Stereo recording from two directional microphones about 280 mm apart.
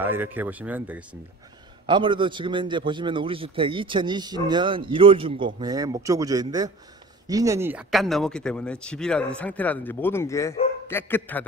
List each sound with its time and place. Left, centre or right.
0.0 s a man's voice: centre
1.9 s a man's voice: centre